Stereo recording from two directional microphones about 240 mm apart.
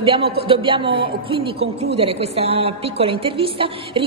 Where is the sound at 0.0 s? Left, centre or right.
Right.